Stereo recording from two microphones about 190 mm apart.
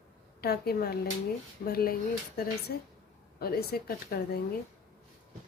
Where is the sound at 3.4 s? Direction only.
55° left (ahead or behind).